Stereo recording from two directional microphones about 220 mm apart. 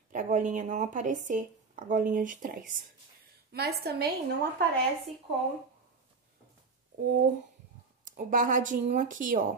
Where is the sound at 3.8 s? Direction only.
45° right (ahead or behind).